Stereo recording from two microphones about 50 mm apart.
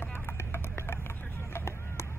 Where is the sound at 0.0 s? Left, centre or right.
Left.